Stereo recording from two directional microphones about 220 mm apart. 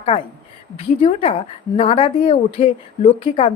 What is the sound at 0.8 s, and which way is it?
A woman's voice, 25° left (ahead or behind).